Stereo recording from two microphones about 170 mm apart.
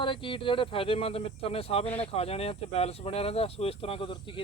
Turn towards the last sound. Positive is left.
turn(degrees=30)  # may be behind; listen again after turning